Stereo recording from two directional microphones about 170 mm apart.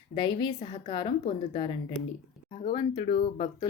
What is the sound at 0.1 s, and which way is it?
A woman's voice, 25° left (ahead or behind).